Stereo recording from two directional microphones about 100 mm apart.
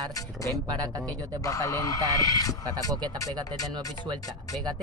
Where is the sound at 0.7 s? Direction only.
40° right (ahead or behind).